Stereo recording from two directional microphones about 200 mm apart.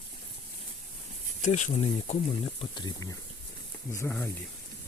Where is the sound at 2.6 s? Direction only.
20° left (ahead or behind).